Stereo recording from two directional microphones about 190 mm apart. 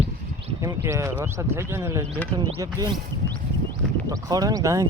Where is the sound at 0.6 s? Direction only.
15° right (ahead or behind).